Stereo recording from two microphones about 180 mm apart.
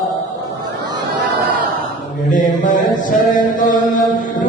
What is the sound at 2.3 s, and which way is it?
Chant, 45° left (ahead or behind).